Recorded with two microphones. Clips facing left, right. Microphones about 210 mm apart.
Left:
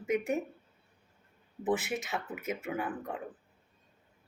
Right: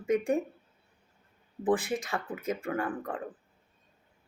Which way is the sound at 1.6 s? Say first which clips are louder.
Right 3 dB; 5° left (ahead or behind).